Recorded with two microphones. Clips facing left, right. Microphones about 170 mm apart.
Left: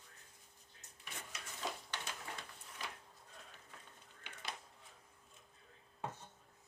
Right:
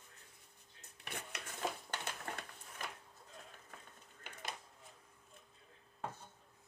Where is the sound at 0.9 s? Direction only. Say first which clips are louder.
Right 4 dB; 65° right (ahead or behind).